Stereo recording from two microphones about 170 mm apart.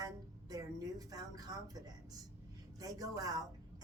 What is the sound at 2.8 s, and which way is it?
Speech, 20° right (ahead or behind).